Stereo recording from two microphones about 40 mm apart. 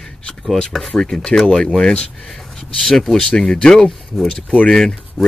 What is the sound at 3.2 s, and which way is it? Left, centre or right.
Speech, left.